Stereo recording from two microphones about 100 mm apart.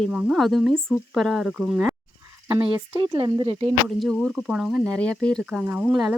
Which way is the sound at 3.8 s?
Centre (ahead or behind).